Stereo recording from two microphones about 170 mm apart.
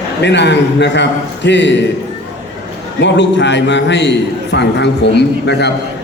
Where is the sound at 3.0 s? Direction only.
90° left.